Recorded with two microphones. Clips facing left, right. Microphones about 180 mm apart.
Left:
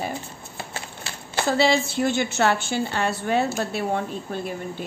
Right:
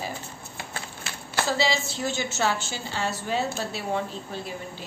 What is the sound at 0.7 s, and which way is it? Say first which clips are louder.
Shuffling cards: left 2 dB; 25° left (ahead or behind).